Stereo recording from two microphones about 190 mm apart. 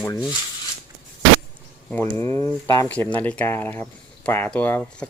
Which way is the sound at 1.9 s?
10° left (ahead or behind).